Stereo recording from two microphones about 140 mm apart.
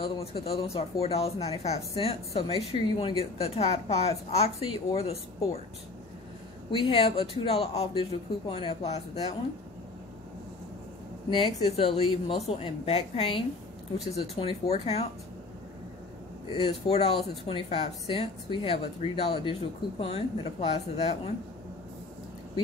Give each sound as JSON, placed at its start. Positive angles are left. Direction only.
{"t": 0.0, "sound": "a man's voice", "side_deg": 45}
{"t": 6.8, "sound": "a woman's voice", "side_deg": 40}
{"t": 11.2, "sound": "a woman's voice", "side_deg": 40}
{"t": 16.6, "sound": "a woman's voice", "side_deg": 45}